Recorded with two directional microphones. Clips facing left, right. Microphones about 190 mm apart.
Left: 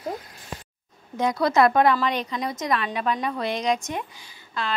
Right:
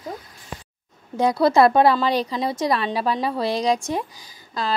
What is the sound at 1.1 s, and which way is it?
Speech, 30° right (ahead or behind).